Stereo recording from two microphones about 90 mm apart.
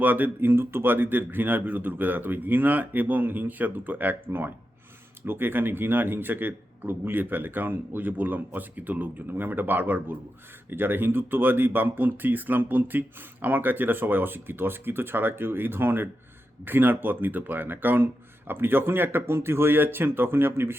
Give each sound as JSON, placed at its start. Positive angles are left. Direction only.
{"t": 0.0, "sound": "speech", "side_deg": -20}